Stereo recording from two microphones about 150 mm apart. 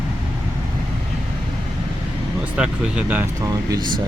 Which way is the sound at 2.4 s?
5° right (ahead or behind).